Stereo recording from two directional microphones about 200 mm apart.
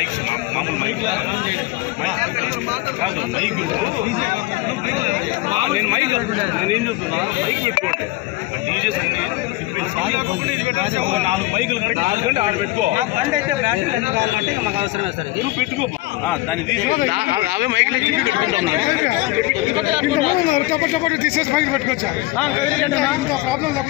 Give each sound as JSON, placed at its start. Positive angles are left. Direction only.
{"t": 5.5, "sound": "speech", "side_deg": -25}
{"t": 12.0, "sound": "a man's voice", "side_deg": -30}
{"t": 17.4, "sound": "speech", "side_deg": -60}